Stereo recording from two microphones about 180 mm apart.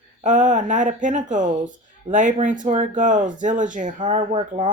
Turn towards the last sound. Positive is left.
turn(degrees=-40)  # may be behind; listen again after turning